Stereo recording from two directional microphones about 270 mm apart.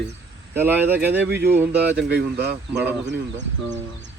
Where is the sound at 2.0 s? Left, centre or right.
Right.